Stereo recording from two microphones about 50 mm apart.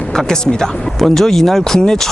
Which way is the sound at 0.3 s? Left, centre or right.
Centre.